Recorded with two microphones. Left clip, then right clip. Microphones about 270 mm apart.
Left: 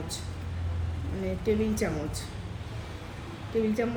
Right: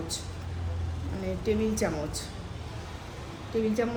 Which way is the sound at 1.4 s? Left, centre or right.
Centre.